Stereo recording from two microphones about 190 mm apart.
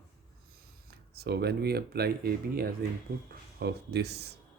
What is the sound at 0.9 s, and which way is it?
Speech, 55° right (ahead or behind).